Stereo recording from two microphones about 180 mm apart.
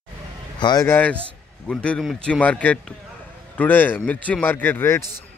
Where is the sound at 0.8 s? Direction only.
10° left (ahead or behind).